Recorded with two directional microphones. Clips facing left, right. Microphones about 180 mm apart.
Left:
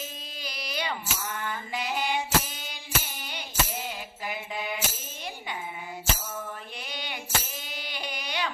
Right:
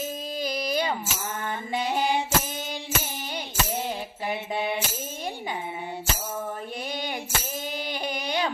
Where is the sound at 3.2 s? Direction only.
45° right (ahead or behind).